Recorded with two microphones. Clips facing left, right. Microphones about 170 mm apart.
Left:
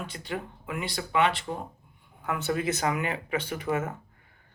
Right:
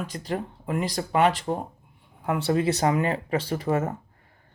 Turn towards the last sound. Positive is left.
turn(degrees=-35)  # may be behind; listen again after turning